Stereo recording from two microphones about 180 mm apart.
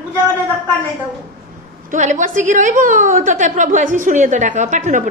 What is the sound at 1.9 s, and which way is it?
A woman's voice, 45° right (ahead or behind).